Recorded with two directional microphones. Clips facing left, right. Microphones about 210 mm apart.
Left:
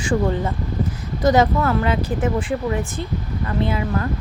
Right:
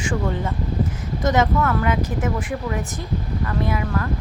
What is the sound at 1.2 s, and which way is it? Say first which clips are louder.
A woman's voice: left 3 dB; 35° left (ahead or behind).